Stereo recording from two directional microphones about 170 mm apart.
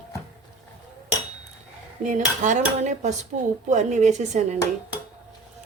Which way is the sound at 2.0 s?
45° right (ahead or behind).